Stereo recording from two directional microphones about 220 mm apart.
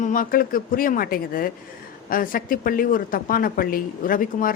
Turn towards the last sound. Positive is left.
turn(degrees=40)  # may be behind; listen again after turning